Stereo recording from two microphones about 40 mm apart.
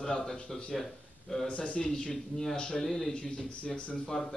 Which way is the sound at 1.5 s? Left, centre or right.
Left.